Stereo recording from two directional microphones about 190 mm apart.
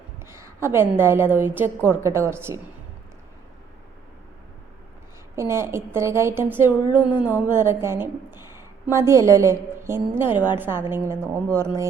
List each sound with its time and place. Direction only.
0.3 s a woman's voice: 15° right (ahead or behind)
5.4 s a woman's voice: 15° right (ahead or behind)